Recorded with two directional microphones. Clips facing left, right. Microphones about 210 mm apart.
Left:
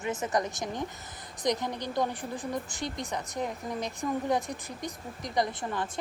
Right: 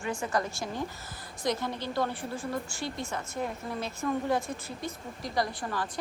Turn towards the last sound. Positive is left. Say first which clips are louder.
# left 1 dB
turn(degrees=20)  # may be behind; listen again after turning